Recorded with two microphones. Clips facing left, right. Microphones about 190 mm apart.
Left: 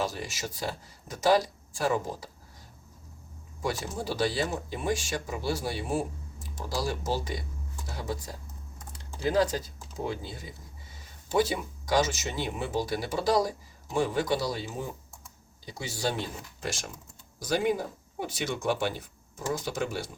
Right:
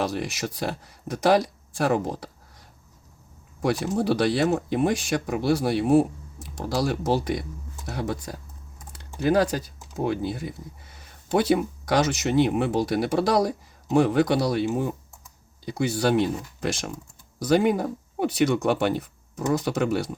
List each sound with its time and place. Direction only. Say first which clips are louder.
0.0 s speech: right 6 dB; 65° right (ahead or behind)
3.6 s speech: right 8 dB; 65° right (ahead or behind)
8.9 s typing: right 7 dB; 65° right (ahead or behind)
9.9 s speech: right 8 dB; 65° right (ahead or behind)